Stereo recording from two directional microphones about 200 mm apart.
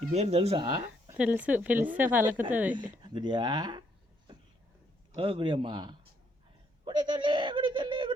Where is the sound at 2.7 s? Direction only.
25° right (ahead or behind).